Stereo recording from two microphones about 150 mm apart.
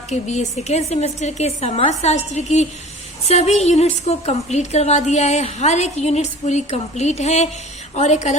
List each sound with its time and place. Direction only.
0.1 s a woman's voice: 50° left (ahead or behind)